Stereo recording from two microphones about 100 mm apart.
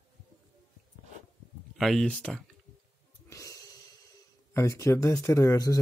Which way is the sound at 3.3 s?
30° left (ahead or behind).